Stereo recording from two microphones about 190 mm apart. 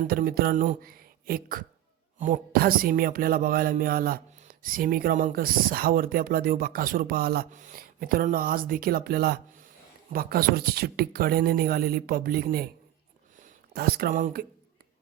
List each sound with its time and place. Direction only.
0.1 s speech: 50° right (ahead or behind)
13.7 s speech: 55° right (ahead or behind)